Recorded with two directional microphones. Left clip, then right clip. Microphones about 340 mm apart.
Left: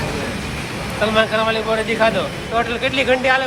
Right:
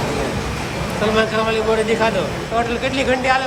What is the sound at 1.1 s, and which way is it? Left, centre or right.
Speech, centre.